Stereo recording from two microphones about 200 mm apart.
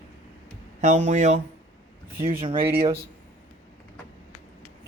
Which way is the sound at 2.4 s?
25° right (ahead or behind).